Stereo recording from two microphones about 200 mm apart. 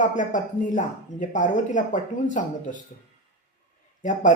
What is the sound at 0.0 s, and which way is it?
Speech, 40° left (ahead or behind).